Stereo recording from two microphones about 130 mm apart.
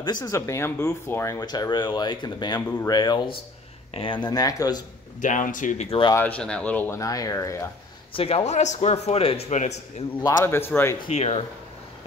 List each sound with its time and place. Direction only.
0.0 s speech: 30° left (ahead or behind)
5.2 s speech: 85° left
5.9 s speech: 40° left (ahead or behind)
6.1 s speech: 10° left (ahead or behind)
6.9 s speech: 25° left (ahead or behind)
8.1 s a man's voice: 45° left (ahead or behind); by 10.0 s 60° left (ahead or behind)
10.2 s speech: 20° left (ahead or behind)
11.1 s speech: 50° left (ahead or behind)